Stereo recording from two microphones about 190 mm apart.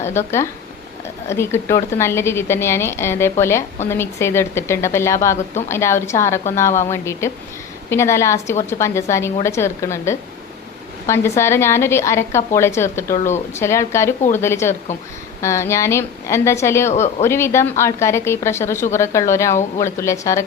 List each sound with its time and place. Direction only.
0.0 s a woman's voice: 15° left (ahead or behind)
13.1 s speech: 35° left (ahead or behind)
13.5 s a woman's voice: 15° left (ahead or behind)
16.9 s speech: 35° left (ahead or behind)
17.2 s a woman's voice: 15° left (ahead or behind)